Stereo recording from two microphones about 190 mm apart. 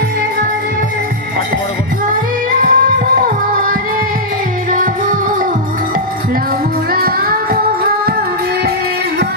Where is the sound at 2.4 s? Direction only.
45° right (ahead or behind).